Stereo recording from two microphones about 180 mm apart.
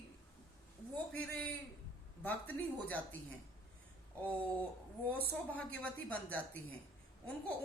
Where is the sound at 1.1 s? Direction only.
10° left (ahead or behind).